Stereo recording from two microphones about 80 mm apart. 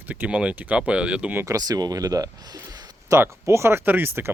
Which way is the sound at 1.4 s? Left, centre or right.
Right.